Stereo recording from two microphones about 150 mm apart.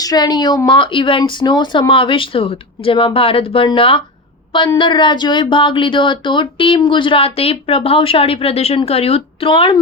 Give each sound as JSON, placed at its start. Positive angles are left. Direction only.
{"t": 0.0, "sound": "speech", "side_deg": 25}